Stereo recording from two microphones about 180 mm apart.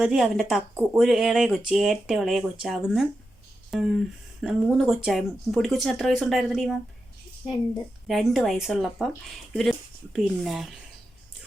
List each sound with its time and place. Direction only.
0.0 s speech: 5° right (ahead or behind)
8.0 s speech: centre (ahead or behind)